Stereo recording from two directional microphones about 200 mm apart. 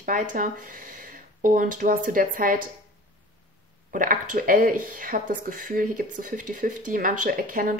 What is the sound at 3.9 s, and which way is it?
Speech, 45° right (ahead or behind).